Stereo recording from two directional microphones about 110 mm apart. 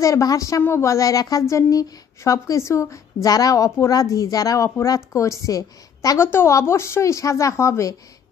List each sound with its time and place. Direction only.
0.0 s a woman's voice: 30° left (ahead or behind)